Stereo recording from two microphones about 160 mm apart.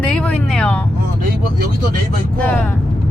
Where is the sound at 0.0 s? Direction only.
5° left (ahead or behind).